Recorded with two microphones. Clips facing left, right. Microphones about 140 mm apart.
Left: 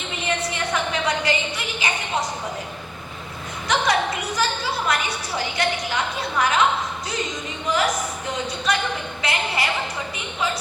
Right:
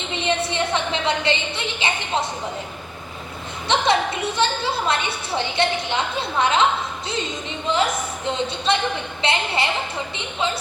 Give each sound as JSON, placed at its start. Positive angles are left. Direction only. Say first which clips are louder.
{"t": 0.3, "sound": "a sound", "louder": "right 3 dB", "side_deg": -25}
{"t": 3.7, "sound": "a woman's voice", "louder": "right 2 dB", "side_deg": -25}
{"t": 7.7, "sound": "a woman's voice", "louder": "right 1 dB", "side_deg": -25}